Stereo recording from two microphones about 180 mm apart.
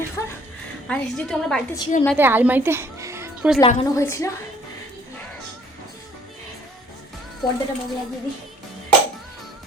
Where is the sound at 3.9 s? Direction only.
15° left (ahead or behind).